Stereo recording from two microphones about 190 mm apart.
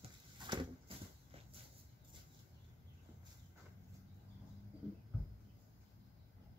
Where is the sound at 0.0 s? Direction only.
25° right (ahead or behind).